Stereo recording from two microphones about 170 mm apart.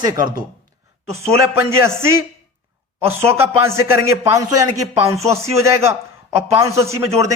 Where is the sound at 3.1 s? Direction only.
15° right (ahead or behind).